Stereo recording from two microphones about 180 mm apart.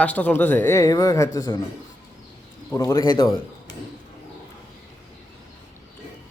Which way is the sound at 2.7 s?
15° left (ahead or behind).